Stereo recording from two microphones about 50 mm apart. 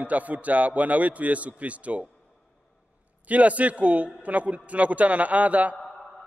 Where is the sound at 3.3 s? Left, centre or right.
Right.